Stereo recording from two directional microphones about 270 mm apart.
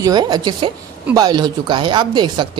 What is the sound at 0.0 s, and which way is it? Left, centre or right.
Speech, centre.